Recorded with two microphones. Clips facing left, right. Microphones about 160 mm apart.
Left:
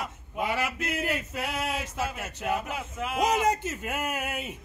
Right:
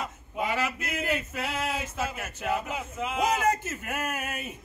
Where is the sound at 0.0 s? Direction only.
10° left (ahead or behind).